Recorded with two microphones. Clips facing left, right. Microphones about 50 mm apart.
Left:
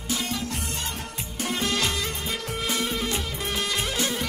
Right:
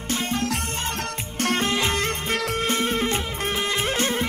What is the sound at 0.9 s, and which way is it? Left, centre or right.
Music, right.